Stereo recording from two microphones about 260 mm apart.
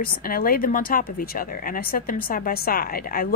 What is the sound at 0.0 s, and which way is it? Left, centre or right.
Speech, left.